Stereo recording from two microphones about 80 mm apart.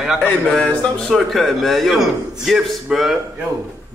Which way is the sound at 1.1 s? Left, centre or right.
Centre.